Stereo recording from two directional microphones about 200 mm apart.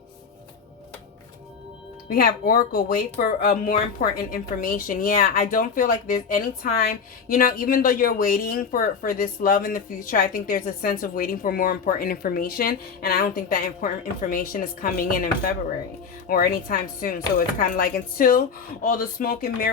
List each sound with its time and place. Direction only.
2.0 s speech: 45° left (ahead or behind)